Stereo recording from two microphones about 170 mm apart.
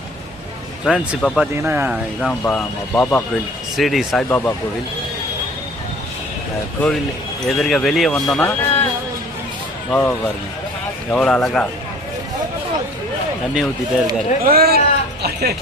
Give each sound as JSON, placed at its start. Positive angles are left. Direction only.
{"t": 0.9, "sound": "speech", "side_deg": 0}
{"t": 2.2, "sound": "speech", "side_deg": 5}
{"t": 4.3, "sound": "speech", "side_deg": 10}
{"t": 7.4, "sound": "speech", "side_deg": 0}
{"t": 9.9, "sound": "speech", "side_deg": 10}
{"t": 13.5, "sound": "speech", "side_deg": 0}
{"t": 14.4, "sound": "a man's voice", "side_deg": -65}